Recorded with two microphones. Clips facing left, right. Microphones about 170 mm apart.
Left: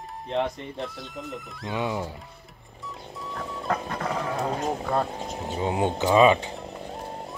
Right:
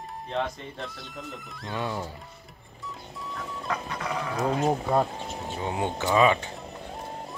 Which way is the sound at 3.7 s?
45° left (ahead or behind).